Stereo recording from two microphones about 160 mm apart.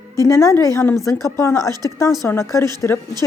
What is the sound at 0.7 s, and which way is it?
A woman's voice, 15° left (ahead or behind).